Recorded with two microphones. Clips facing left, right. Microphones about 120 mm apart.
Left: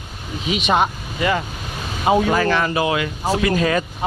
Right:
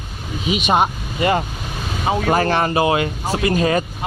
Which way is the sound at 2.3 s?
45° right (ahead or behind).